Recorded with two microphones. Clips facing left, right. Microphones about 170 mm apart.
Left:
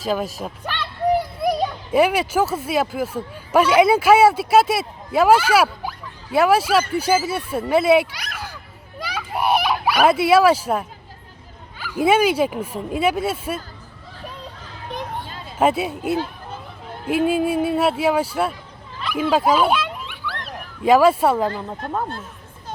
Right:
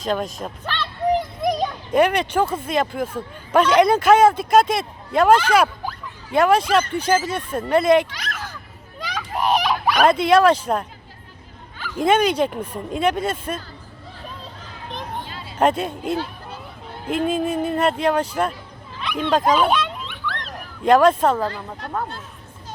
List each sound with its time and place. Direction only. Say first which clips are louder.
0.0 s speech: left 1 dB; 5° left (ahead or behind)
9.0 s a sound: even; 10° left (ahead or behind)
11.8 s speech: left 1 dB; 5° left (ahead or behind)
15.5 s speech: even; 5° left (ahead or behind)
18.9 s a sound: left 1 dB; 5° left (ahead or behind)
21.4 s speech: left 3 dB; 15° left (ahead or behind)